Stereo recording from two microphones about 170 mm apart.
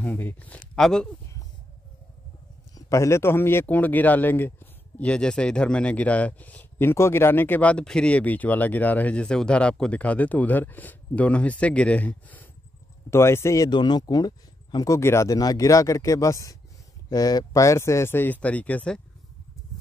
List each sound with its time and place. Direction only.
0.0 s speech: 10° left (ahead or behind)
2.7 s a man's voice: 20° left (ahead or behind)